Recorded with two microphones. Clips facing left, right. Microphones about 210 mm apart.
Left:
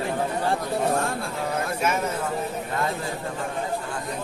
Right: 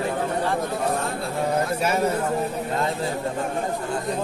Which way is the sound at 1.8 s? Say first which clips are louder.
Right 3 dB; 35° right (ahead or behind).